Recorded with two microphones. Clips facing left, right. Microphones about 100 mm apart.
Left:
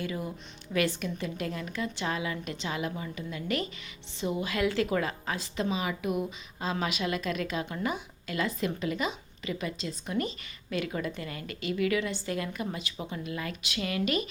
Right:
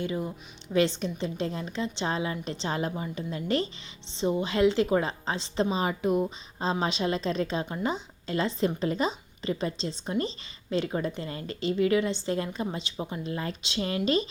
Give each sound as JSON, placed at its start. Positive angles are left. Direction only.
{"t": 0.0, "sound": "a woman's voice", "side_deg": -25}